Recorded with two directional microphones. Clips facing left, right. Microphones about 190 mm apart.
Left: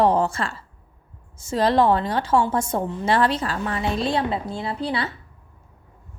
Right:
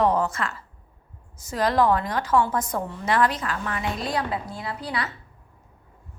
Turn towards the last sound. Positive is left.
turn(degrees=30)  # may be behind; listen again after turning